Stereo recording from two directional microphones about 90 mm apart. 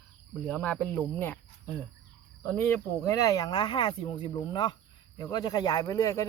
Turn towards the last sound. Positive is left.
turn(degrees=40)  # may be behind; listen again after turning